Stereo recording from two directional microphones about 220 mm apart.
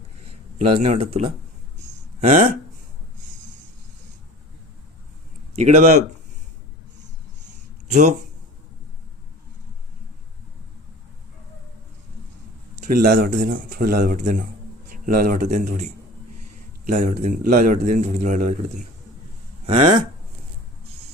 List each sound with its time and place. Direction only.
0.3 s a man's voice: 25° right (ahead or behind)
5.5 s speech: 30° right (ahead or behind)
12.8 s a man's voice: 40° right (ahead or behind)
19.6 s speech: 30° right (ahead or behind)